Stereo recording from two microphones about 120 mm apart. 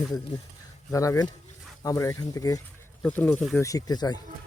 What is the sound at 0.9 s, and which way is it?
Speech, 25° left (ahead or behind).